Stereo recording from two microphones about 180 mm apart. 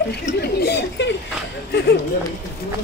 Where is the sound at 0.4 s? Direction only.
65° left (ahead or behind).